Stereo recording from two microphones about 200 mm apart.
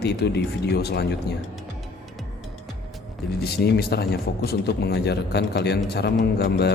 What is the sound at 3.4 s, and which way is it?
Speech, 50° left (ahead or behind).